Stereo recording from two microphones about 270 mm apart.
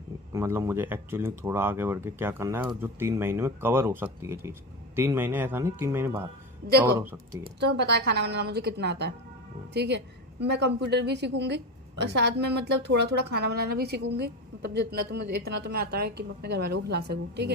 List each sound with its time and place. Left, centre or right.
0.3 s speech: centre
7.6 s a woman's voice: right